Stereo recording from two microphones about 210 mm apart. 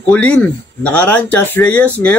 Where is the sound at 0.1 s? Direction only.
5° left (ahead or behind).